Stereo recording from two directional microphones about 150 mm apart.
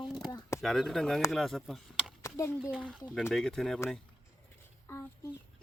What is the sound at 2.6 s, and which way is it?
Speech, 5° right (ahead or behind).